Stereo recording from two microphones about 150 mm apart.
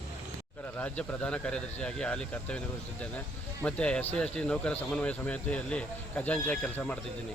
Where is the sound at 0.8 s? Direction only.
10° left (ahead or behind).